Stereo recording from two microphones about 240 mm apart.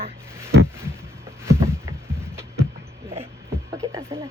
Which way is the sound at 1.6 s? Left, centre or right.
Centre.